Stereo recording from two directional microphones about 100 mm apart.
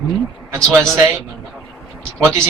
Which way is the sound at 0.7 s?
25° right (ahead or behind).